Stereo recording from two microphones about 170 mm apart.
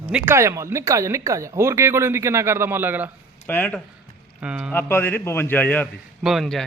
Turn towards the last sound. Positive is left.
turn(degrees=0)  # may be behind; listen again after turning